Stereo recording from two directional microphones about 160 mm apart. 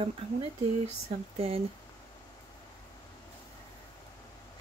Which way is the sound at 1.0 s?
40° right (ahead or behind).